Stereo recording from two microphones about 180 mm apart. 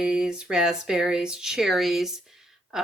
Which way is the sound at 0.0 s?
5° right (ahead or behind).